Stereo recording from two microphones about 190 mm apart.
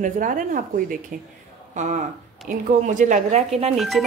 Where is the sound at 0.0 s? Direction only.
45° right (ahead or behind).